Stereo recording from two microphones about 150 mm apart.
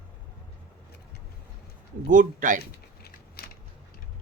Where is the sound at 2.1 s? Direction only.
60° right (ahead or behind).